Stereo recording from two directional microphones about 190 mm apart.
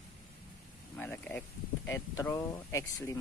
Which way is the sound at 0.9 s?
10° left (ahead or behind).